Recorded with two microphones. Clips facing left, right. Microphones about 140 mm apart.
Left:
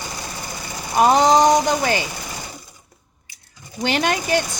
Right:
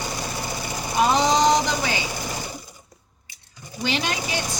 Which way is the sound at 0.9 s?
50° left (ahead or behind).